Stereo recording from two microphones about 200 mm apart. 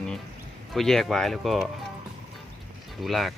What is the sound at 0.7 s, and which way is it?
Speech, centre (ahead or behind).